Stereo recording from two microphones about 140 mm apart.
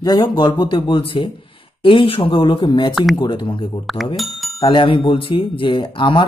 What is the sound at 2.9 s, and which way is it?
Speech, centre (ahead or behind).